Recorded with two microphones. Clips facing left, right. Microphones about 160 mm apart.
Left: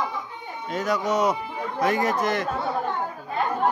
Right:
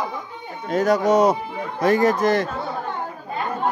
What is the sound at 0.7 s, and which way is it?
Speech, 40° right (ahead or behind).